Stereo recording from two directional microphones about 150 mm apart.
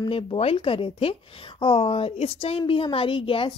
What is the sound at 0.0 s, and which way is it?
A woman's voice, 35° left (ahead or behind).